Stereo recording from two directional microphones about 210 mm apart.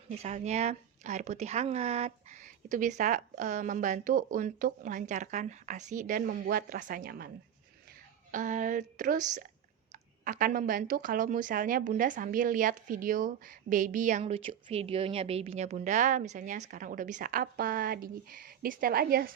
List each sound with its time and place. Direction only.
0.2 s speech: 35° right (ahead or behind)
8.3 s speech: 40° right (ahead or behind)